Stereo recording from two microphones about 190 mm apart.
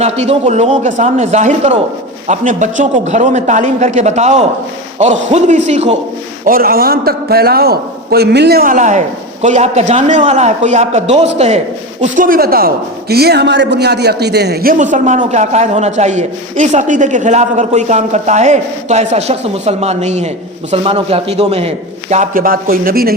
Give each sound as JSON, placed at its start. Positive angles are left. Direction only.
{"t": 0.0, "sound": "speech", "side_deg": -35}
{"t": 6.4, "sound": "a man's voice", "side_deg": -50}